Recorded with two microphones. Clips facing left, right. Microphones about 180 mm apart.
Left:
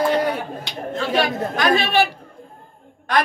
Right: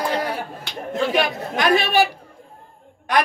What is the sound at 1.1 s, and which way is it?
A man's voice, 20° right (ahead or behind).